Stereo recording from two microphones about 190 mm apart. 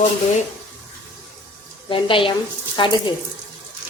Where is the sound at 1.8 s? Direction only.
25° left (ahead or behind).